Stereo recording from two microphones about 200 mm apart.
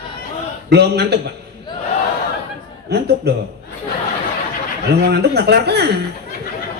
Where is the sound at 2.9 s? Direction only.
55° right (ahead or behind).